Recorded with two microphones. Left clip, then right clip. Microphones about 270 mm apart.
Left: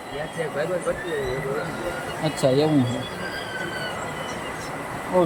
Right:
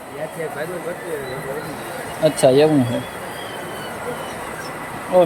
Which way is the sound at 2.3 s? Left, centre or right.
Centre.